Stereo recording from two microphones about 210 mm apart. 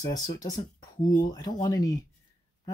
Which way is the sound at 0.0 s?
15° left (ahead or behind).